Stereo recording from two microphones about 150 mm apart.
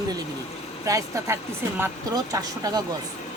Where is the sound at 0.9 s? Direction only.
20° right (ahead or behind).